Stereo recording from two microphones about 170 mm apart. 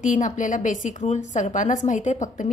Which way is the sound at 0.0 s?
45° left (ahead or behind).